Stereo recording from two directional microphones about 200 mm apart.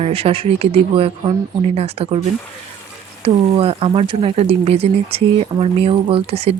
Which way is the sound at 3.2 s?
30° right (ahead or behind).